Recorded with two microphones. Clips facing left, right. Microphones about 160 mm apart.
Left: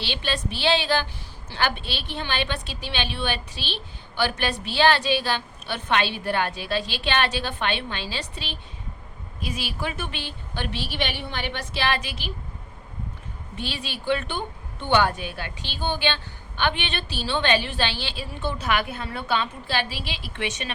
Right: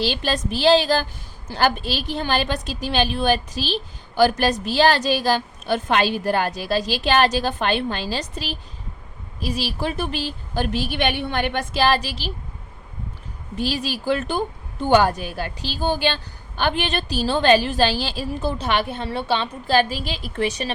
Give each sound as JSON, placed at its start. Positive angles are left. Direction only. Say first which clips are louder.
{"t": 0.0, "sound": "a woman's voice", "louder": "right 6 dB", "side_deg": -40}
{"t": 13.6, "sound": "a woman's voice", "louder": "right 8 dB", "side_deg": -40}
{"t": 19.6, "sound": "a woman's voice", "louder": "right 8 dB", "side_deg": -45}